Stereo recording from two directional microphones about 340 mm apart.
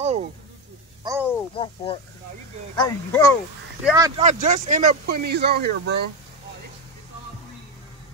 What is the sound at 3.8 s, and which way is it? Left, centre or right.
Speech, centre.